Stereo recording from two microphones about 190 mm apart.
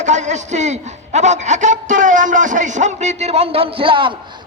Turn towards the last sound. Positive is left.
turn(degrees=-25)  # may be behind; listen again after turning